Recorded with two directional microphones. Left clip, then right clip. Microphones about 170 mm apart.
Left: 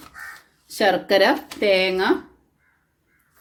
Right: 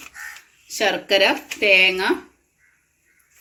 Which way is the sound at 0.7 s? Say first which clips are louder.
Left 1 dB; 40° left (ahead or behind).